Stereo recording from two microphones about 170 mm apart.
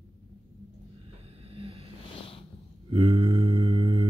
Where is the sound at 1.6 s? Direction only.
35° right (ahead or behind).